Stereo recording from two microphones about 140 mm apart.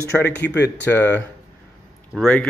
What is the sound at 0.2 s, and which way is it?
Speech, 10° left (ahead or behind).